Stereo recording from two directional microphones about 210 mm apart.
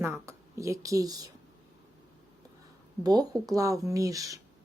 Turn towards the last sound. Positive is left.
turn(degrees=-15)  # may be behind; listen again after turning